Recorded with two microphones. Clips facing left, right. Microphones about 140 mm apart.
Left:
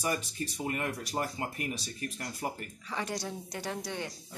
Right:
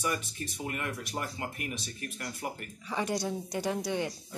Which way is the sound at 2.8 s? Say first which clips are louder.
Right 4 dB; 15° right (ahead or behind).